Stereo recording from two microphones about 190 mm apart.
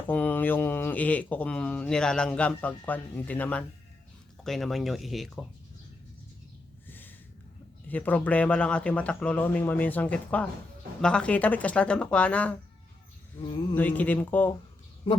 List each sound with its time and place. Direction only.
0.1 s speech: 10° left (ahead or behind)
6.8 s snort: 10° left (ahead or behind)
7.9 s speech: 10° left (ahead or behind)
13.4 s a sound: 25° left (ahead or behind)
13.7 s speech: 10° left (ahead or behind)
15.1 s a woman's voice: 30° left (ahead or behind)